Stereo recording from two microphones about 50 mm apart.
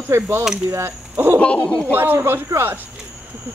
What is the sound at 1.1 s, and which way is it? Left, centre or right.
Speech, right.